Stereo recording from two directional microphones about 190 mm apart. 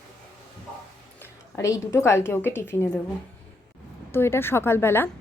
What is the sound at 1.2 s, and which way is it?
A woman's voice, 15° left (ahead or behind).